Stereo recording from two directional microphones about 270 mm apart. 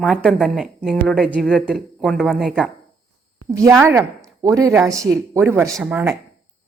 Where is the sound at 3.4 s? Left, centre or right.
Right.